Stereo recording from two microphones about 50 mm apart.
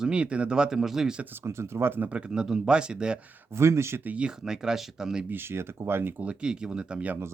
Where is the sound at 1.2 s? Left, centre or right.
Right.